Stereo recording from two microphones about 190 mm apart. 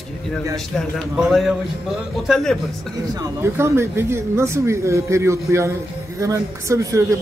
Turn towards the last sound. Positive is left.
turn(degrees=-15)  # may be behind; listen again after turning